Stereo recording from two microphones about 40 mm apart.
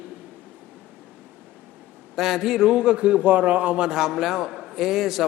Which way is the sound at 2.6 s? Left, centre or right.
Right.